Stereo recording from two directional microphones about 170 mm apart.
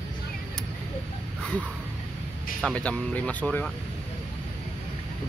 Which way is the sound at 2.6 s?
5° left (ahead or behind).